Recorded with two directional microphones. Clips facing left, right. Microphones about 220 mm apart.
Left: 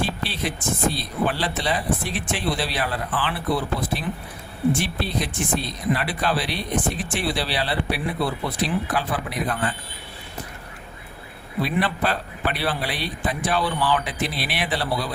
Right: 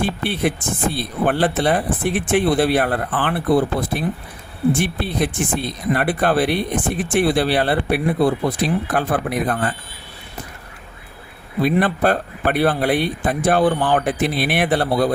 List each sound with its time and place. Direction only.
0.0 s speech: 55° right (ahead or behind)
11.6 s speech: 50° right (ahead or behind)